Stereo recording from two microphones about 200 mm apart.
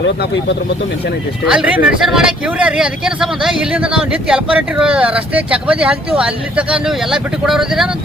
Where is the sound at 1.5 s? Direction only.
5° right (ahead or behind).